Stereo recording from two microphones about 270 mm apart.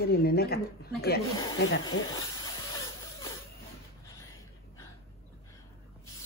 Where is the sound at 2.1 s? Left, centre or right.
Centre.